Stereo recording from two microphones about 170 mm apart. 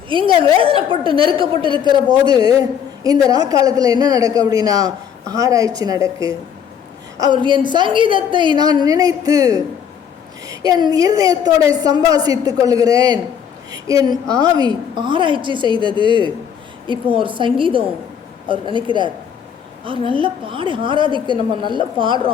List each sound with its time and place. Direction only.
0.1 s a woman's voice: 30° right (ahead or behind)